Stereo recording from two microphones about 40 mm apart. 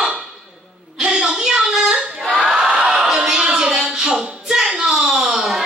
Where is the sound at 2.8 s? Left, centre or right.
Centre.